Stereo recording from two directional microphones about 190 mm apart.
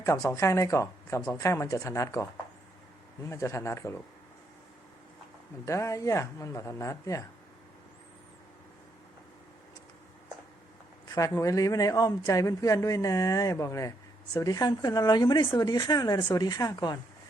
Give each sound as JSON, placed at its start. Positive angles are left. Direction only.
{"t": 0.0, "sound": "speech", "side_deg": 15}
{"t": 5.6, "sound": "speech", "side_deg": 15}
{"t": 11.1, "sound": "speech", "side_deg": 20}